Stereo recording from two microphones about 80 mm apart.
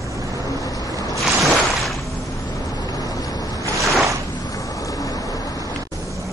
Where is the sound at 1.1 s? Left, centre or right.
Centre.